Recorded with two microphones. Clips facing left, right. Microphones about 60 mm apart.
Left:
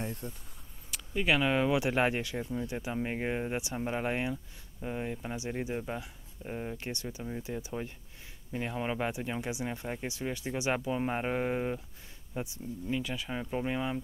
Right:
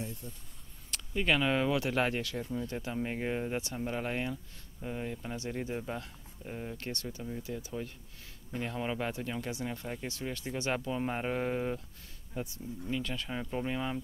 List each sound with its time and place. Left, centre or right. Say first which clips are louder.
0.0 s a sound: left 4 dB; left
0.8 s speech: left 1 dB; centre
1.7 s speech: left 2 dB; centre